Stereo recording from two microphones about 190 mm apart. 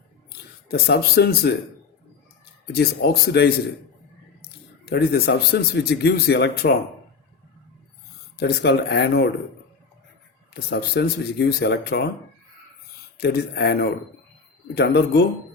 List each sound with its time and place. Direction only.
0.7 s speech: 60° left (ahead or behind)
2.7 s speech: 60° left (ahead or behind)
4.9 s speech: 55° left (ahead or behind)
8.4 s speech: 60° left (ahead or behind)
10.5 s speech: 60° left (ahead or behind)
13.1 s speech: 60° left (ahead or behind)